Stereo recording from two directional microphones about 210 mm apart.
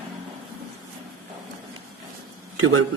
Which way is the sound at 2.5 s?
75° right (ahead or behind).